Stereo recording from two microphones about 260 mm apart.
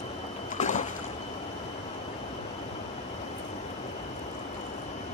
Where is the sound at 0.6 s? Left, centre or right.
Left.